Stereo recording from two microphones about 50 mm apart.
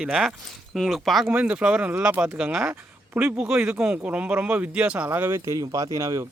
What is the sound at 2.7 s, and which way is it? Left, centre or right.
Speech, right.